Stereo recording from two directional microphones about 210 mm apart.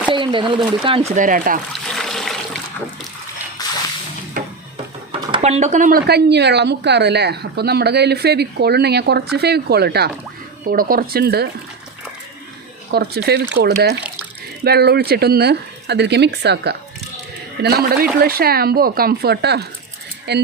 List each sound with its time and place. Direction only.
0.1 s speech: 25° right (ahead or behind)
1.2 s speech: 40° right (ahead or behind)
2.0 s toilet flush: centre (ahead or behind)
3.6 s whip: 20° left (ahead or behind)
4.4 s music: 40° right (ahead or behind)
5.3 s speech: 30° right (ahead or behind); by 11.5 s 50° right (ahead or behind)
12.9 s speech: 50° right (ahead or behind)